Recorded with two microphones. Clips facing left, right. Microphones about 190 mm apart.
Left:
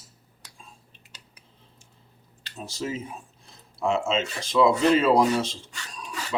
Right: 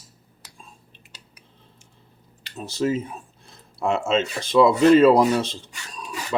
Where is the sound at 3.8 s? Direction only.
60° right (ahead or behind).